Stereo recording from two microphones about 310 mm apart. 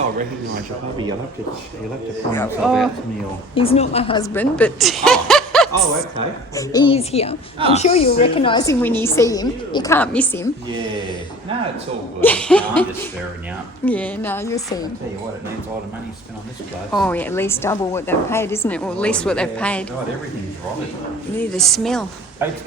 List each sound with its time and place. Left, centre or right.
2.3 s a woman's voice: centre
3.5 s a woman's voice: centre
12.2 s a woman's voice: centre
13.8 s a woman's voice: centre
16.9 s a woman's voice: centre
21.5 s a woman's voice: centre